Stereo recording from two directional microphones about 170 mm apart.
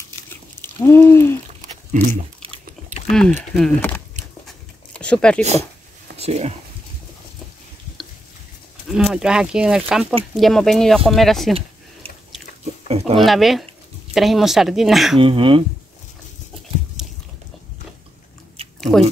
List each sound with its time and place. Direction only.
0.3 s a sound: 15° left (ahead or behind)
1.9 s a sound: 45° right (ahead or behind)
3.1 s speech: centre (ahead or behind)
4.5 s a sound: 5° left (ahead or behind)
5.4 s speech: 40° right (ahead or behind)
8.8 s speech: 5° right (ahead or behind)
12.8 s speech: 35° right (ahead or behind)
13.2 s speech: centre (ahead or behind)
15.1 s speech: 30° right (ahead or behind)
17.0 s biting: 5° right (ahead or behind)
18.8 s chewing: centre (ahead or behind)